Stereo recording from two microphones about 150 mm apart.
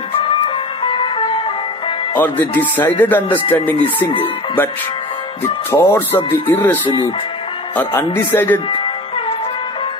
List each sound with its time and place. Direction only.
0.8 s music: 35° left (ahead or behind)
2.1 s speech: 15° left (ahead or behind)
5.8 s speech: 15° left (ahead or behind)